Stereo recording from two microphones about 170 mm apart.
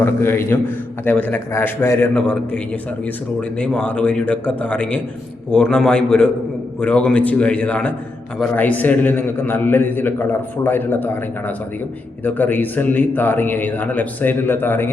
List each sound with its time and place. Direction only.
0.0 s a man's voice: 15° left (ahead or behind)
3.6 s a man's voice: 5° left (ahead or behind)